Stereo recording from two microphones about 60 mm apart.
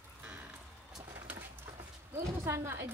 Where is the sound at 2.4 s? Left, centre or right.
Right.